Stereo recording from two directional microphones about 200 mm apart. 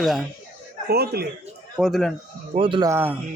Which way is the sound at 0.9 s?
50° right (ahead or behind).